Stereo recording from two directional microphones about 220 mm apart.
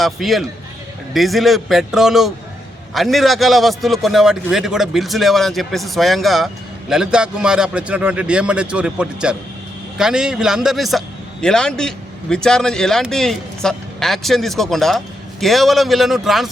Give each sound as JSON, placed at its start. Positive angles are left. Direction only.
{"t": 0.0, "sound": "a man's voice", "side_deg": 0}